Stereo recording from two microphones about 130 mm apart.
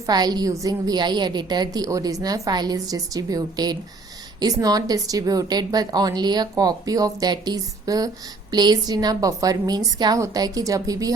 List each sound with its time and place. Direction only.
0.1 s a woman's voice: 30° right (ahead or behind)